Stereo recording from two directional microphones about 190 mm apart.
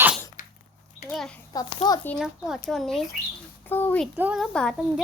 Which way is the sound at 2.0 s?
5° left (ahead or behind).